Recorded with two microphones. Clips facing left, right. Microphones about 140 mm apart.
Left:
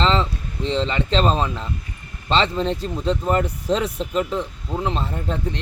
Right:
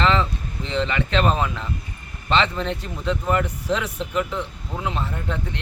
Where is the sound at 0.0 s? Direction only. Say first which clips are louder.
Left 1 dB; 25° left (ahead or behind).